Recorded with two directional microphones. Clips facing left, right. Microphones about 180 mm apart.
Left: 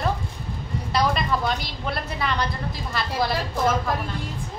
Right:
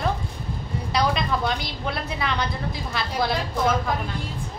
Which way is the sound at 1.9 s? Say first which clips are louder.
Left 1 dB; centre (ahead or behind).